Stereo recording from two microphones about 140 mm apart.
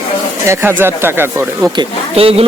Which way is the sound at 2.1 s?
45° right (ahead or behind).